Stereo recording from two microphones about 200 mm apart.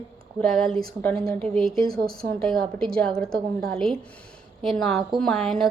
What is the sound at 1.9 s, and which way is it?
Speech, 50° right (ahead or behind).